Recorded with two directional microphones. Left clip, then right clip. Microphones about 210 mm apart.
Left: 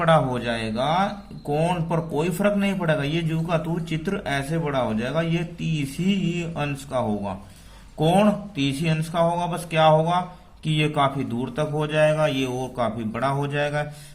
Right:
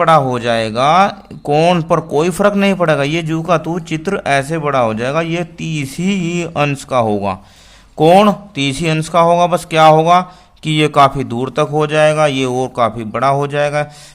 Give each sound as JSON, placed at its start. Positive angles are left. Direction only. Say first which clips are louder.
{"t": 0.0, "sound": "speech", "louder": "right 9 dB", "side_deg": -35}